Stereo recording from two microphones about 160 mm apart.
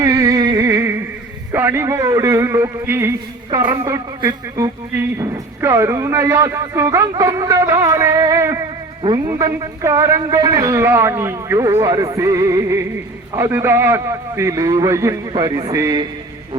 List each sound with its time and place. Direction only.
0.0 s a sound: 20° right (ahead or behind)
1.5 s a man's voice: 15° right (ahead or behind)
3.5 s a man's voice: 30° right (ahead or behind)